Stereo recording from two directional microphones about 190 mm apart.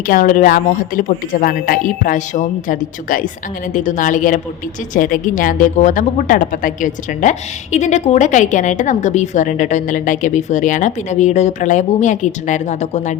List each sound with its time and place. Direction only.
0.1 s a woman's voice: 45° left (ahead or behind)